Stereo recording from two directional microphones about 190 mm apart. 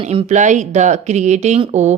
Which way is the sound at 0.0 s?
30° right (ahead or behind).